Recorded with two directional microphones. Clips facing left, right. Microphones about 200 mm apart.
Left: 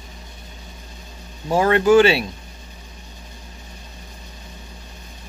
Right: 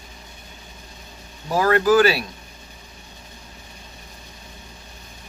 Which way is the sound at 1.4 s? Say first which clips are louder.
Left 2 dB; 25° left (ahead or behind).